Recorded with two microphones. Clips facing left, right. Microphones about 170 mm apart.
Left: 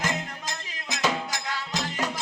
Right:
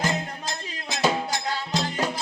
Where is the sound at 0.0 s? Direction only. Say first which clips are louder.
Right 3 dB; 35° right (ahead or behind).